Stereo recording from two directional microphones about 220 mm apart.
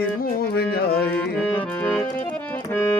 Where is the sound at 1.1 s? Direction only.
5° left (ahead or behind).